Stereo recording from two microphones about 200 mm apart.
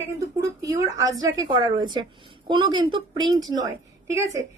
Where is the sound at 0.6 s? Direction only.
15° right (ahead or behind).